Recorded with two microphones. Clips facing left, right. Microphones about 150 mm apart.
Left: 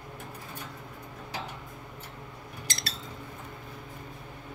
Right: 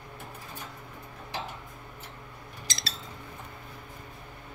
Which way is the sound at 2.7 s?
55° left (ahead or behind).